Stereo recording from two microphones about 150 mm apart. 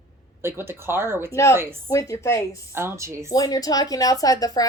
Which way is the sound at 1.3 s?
20° left (ahead or behind).